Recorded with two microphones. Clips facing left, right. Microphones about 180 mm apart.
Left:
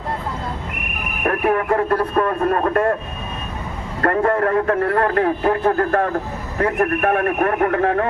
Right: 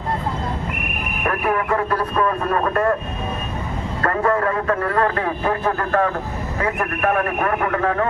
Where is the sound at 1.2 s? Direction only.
40° left (ahead or behind).